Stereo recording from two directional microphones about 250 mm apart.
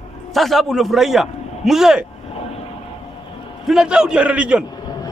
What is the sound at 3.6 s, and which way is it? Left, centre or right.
A man's voice, centre.